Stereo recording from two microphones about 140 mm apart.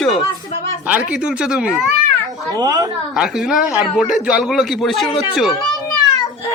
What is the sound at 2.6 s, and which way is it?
Speech, 25° right (ahead or behind).